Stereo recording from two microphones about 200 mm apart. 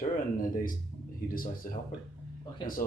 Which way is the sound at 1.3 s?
45° left (ahead or behind).